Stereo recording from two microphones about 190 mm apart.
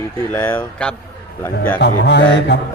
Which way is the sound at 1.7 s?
60° left (ahead or behind).